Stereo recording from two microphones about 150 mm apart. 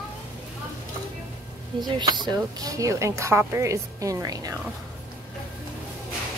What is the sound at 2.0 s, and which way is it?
Speech, 30° right (ahead or behind).